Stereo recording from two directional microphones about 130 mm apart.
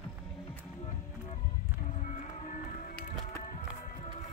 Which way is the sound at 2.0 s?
70° left (ahead or behind).